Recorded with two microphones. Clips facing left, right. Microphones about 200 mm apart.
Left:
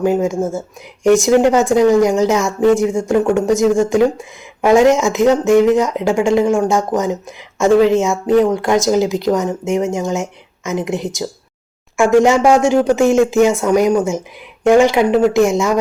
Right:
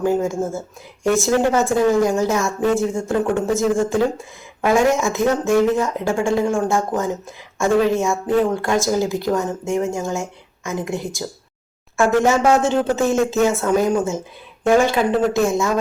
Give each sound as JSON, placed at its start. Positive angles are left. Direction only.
{"t": 0.0, "sound": "speech", "side_deg": 15}
{"t": 14.7, "sound": "speech", "side_deg": 15}